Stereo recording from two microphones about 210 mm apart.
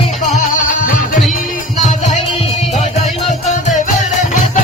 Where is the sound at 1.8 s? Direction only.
35° left (ahead or behind).